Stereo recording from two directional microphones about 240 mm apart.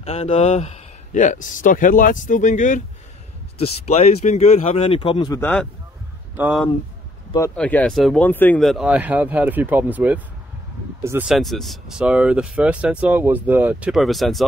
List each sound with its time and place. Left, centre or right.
0.0 s speech: left
5.4 s speech: centre
6.3 s speech: centre
7.3 s speech: centre